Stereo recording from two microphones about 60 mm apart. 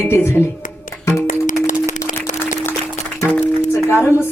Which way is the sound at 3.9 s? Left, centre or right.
Left.